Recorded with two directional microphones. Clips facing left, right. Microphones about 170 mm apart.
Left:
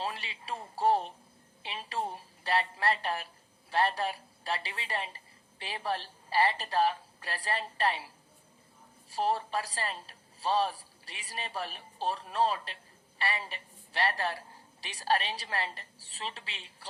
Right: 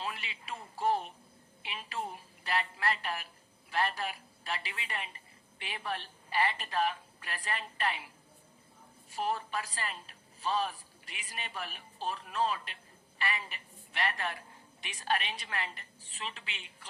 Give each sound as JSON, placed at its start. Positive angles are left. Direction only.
{"t": 0.0, "sound": "a woman's voice", "side_deg": 35}